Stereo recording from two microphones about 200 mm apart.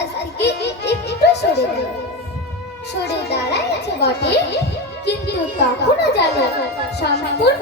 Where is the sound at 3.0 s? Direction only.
55° left (ahead or behind).